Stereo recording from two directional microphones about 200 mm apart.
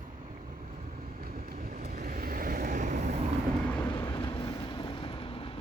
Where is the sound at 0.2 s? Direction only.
40° right (ahead or behind).